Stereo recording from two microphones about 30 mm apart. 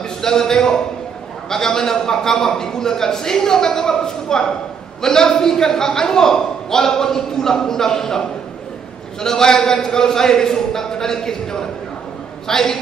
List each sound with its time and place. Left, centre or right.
0.2 s a man's voice: centre
9.2 s a man's voice: left